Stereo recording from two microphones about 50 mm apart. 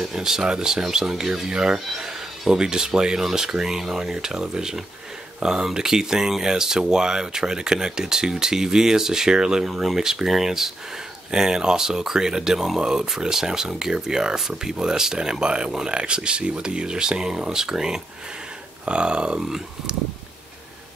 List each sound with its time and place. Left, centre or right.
0.0 s speech: centre